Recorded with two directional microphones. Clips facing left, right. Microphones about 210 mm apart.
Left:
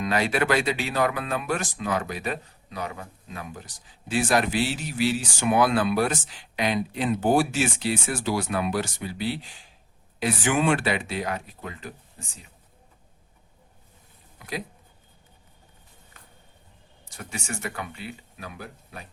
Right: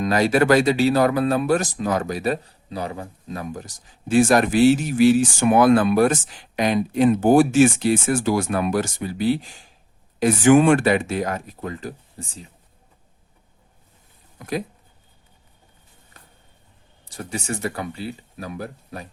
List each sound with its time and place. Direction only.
0.0 s speech: 40° right (ahead or behind)
14.3 s speech: 45° right (ahead or behind)
17.1 s speech: 35° right (ahead or behind)